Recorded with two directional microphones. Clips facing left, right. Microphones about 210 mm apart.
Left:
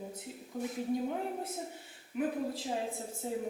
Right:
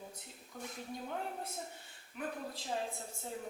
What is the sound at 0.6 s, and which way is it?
A woman's voice, 5° left (ahead or behind).